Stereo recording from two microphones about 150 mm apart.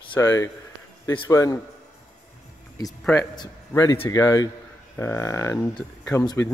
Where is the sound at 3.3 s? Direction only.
25° left (ahead or behind).